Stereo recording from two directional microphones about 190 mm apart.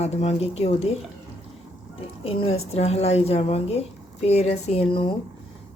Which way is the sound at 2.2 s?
30° left (ahead or behind).